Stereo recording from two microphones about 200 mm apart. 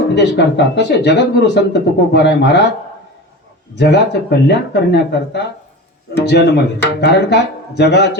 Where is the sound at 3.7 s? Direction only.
60° left (ahead or behind).